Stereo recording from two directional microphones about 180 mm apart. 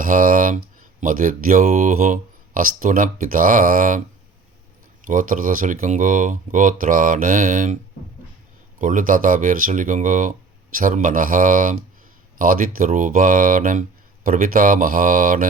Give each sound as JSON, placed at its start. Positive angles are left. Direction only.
{"t": 0.0, "sound": "speech", "side_deg": -50}
{"t": 5.0, "sound": "speech", "side_deg": -50}
{"t": 8.8, "sound": "speech", "side_deg": -45}